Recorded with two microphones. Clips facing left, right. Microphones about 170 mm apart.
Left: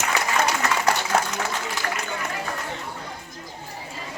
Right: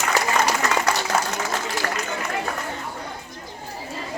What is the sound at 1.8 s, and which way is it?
Run, 45° right (ahead or behind).